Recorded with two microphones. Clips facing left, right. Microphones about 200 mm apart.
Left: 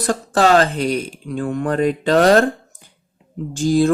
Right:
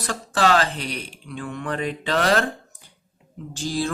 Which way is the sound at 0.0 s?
45° left (ahead or behind).